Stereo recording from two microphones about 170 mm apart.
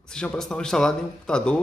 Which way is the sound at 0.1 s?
5° left (ahead or behind).